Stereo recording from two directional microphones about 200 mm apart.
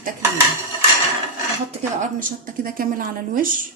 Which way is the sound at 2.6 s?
45° right (ahead or behind).